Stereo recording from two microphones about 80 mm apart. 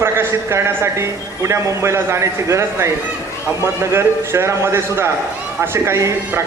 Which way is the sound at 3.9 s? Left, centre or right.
Right.